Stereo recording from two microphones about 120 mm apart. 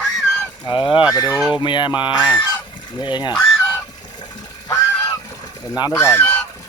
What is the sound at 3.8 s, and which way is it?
Honk, 35° left (ahead or behind).